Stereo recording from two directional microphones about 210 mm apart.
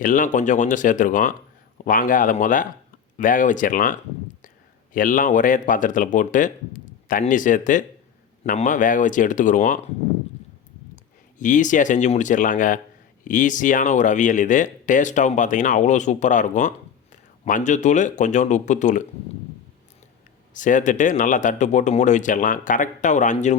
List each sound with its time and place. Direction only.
0.0 s speech: 40° left (ahead or behind)
4.9 s speech: 40° left (ahead or behind)
11.3 s speech: 35° left (ahead or behind)
20.5 s speech: 40° left (ahead or behind)